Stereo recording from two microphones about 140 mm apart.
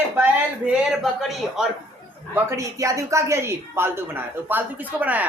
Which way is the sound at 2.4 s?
20° right (ahead or behind).